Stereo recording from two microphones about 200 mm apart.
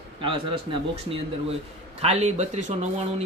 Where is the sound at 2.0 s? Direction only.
30° right (ahead or behind).